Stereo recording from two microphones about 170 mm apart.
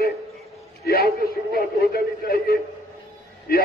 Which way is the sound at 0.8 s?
65° left (ahead or behind).